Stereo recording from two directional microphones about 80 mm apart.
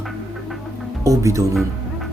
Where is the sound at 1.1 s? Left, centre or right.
Right.